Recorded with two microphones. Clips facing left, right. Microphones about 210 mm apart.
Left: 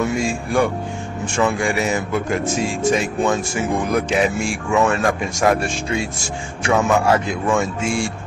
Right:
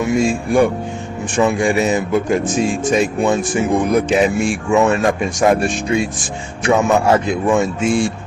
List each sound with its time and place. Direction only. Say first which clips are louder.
0.0 s speech: right 4 dB; 15° right (ahead or behind)